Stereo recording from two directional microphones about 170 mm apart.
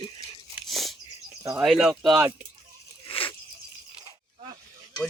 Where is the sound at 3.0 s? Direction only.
30° left (ahead or behind).